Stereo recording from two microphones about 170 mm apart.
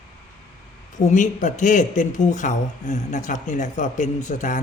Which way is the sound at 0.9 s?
45° left (ahead or behind).